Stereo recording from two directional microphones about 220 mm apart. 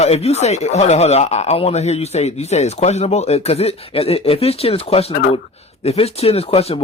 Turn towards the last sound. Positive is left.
turn(degrees=25)  # may be behind; listen again after turning